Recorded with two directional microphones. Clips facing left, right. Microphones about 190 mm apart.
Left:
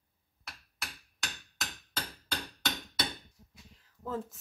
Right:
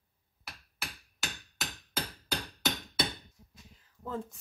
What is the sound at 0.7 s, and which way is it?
Hammer, 5° right (ahead or behind).